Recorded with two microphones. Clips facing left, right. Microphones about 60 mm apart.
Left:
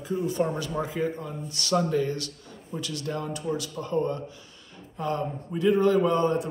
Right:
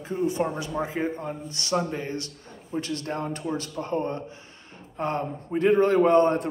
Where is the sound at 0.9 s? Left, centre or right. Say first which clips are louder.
Right 1 dB; right.